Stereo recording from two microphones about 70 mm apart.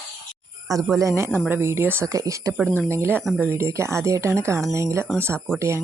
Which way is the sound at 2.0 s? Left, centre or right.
Right.